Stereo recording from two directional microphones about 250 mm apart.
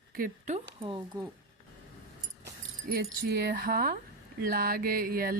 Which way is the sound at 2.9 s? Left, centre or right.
Right.